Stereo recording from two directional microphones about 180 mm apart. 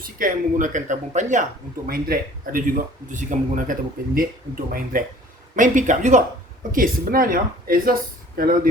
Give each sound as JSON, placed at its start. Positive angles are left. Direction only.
{"t": 0.0, "sound": "speech", "side_deg": -50}